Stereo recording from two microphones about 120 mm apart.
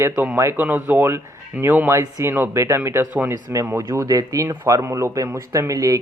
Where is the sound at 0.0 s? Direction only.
20° right (ahead or behind).